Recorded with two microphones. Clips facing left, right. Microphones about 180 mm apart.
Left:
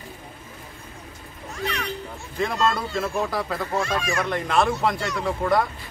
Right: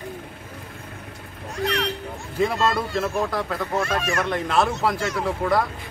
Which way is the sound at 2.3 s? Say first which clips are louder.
Right 2 dB; centre (ahead or behind).